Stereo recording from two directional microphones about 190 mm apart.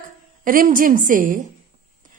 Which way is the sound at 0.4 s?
45° right (ahead or behind).